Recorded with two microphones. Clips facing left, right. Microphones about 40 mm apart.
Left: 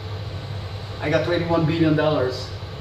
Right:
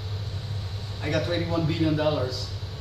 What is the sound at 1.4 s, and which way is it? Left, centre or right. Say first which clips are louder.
Speech: left 6 dB; left.